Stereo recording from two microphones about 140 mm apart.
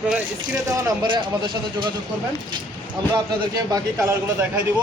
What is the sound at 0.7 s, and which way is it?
Speech, 30° right (ahead or behind).